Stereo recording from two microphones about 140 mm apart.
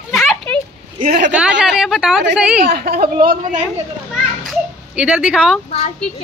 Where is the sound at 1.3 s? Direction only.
5° right (ahead or behind).